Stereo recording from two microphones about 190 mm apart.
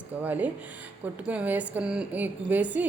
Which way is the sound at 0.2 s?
10° right (ahead or behind).